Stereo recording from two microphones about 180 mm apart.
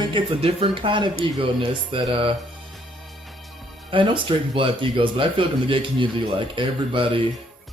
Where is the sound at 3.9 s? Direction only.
30° right (ahead or behind).